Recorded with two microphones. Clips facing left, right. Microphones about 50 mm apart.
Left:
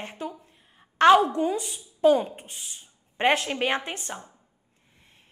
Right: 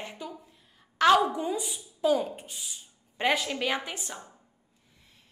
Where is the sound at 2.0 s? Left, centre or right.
Left.